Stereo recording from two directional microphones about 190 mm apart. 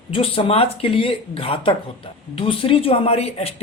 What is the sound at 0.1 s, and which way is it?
Speech, 30° left (ahead or behind).